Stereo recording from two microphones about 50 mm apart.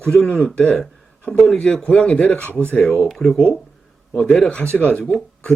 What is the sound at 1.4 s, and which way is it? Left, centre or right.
Speech, centre.